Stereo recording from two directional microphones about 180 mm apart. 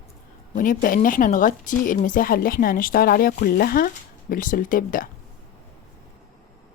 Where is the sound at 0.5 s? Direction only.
50° left (ahead or behind).